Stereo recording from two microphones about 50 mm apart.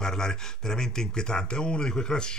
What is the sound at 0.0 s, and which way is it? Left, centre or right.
Speech, centre.